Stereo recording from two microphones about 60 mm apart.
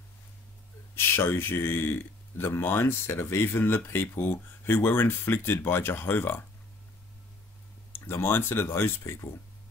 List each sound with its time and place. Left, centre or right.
0.9 s speech: left
7.9 s speech: left